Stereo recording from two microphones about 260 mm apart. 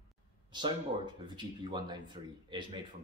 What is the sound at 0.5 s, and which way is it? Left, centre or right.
A man's voice, centre.